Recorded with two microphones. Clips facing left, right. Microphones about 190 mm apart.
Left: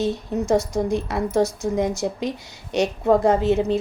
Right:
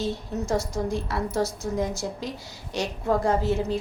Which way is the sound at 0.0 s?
20° left (ahead or behind).